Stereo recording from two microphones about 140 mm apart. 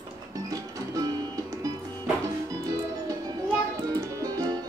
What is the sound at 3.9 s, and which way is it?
Music, 25° right (ahead or behind).